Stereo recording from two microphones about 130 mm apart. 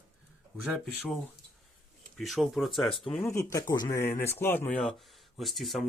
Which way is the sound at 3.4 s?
25° left (ahead or behind).